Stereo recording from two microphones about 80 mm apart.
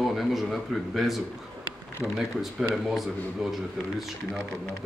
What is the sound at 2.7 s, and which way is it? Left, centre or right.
Speech, centre.